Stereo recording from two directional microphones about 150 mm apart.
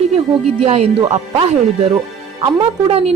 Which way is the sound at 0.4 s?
45° right (ahead or behind).